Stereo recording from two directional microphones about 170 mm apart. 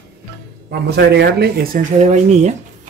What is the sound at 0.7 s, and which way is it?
Speech, 75° right (ahead or behind).